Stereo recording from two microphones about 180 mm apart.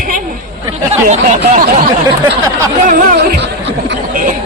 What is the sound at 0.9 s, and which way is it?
Speech, 40° right (ahead or behind).